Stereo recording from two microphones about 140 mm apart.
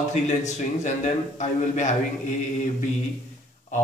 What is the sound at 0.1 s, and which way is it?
A man's voice, 55° left (ahead or behind).